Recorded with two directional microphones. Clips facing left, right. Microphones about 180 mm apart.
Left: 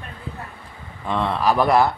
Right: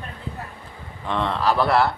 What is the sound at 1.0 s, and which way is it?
Speech, 10° left (ahead or behind).